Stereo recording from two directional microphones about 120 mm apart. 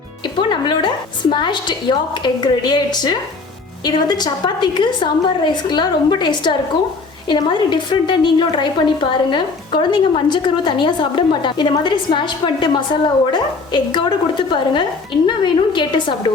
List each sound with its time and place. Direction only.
0.3 s a woman's voice: 40° left (ahead or behind)